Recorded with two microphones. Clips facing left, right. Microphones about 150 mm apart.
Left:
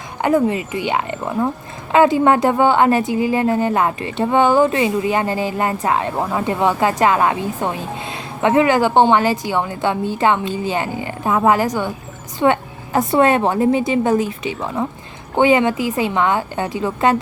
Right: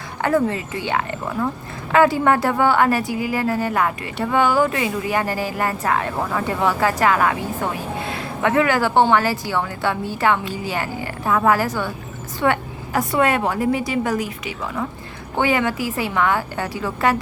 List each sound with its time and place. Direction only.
0.2 s a woman's voice: 15° left (ahead or behind)